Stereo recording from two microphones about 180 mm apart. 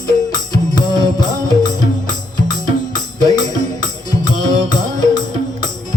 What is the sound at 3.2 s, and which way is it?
Music, 20° left (ahead or behind).